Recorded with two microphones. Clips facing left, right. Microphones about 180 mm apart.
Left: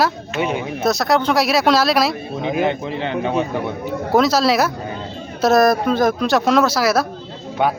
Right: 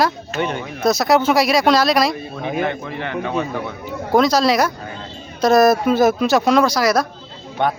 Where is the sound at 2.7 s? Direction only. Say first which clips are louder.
Left 3 dB; 25° left (ahead or behind).